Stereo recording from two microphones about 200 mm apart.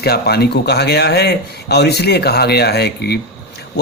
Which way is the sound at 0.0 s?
55° left (ahead or behind).